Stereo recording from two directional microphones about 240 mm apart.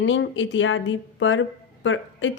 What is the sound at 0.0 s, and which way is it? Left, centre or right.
Speech, left.